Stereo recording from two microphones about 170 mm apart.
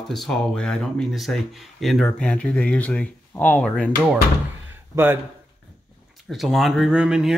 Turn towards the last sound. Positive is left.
turn(degrees=-5)  # may be behind; listen again after turning